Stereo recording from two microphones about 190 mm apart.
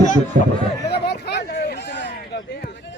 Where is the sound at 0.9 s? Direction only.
60° left (ahead or behind).